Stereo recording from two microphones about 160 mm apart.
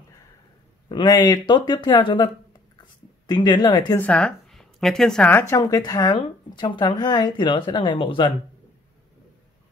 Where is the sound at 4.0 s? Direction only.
5° left (ahead or behind); by 8.3 s 35° left (ahead or behind).